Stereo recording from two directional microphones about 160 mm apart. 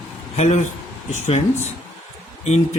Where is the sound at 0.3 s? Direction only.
45° left (ahead or behind).